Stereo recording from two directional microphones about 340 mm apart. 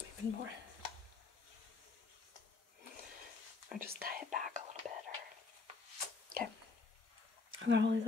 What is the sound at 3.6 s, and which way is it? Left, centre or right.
Whispering, right.